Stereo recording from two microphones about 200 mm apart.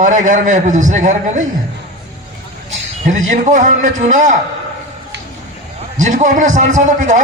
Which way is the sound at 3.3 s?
40° right (ahead or behind).